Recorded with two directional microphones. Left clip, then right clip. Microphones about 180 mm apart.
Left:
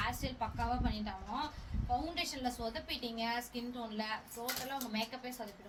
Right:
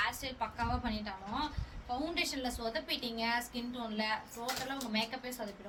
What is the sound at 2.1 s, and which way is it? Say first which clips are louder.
A woman's voice: right 2 dB; 25° right (ahead or behind).